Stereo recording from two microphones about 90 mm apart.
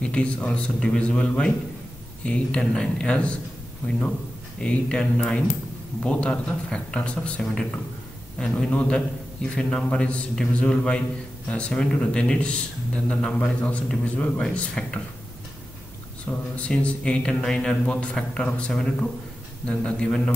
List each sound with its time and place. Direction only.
0.0 s speech: 10° left (ahead or behind)
4.6 s speech: 10° left (ahead or behind)
16.3 s speech: 15° left (ahead or behind)